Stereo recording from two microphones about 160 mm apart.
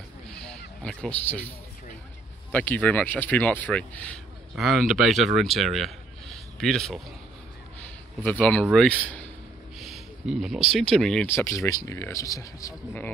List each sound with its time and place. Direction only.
0.3 s honk: 5° left (ahead or behind)
0.8 s speech: 5° left (ahead or behind)
2.5 s speech: 10° left (ahead or behind)
8.2 s speech: 10° left (ahead or behind)
9.8 s speech: centre (ahead or behind)
11.2 s speech: 15° left (ahead or behind)